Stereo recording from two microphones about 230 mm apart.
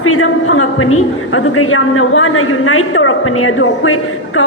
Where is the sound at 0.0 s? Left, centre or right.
Left.